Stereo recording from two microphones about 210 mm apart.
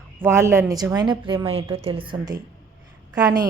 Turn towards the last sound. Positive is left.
turn(degrees=-15)  # may be behind; listen again after turning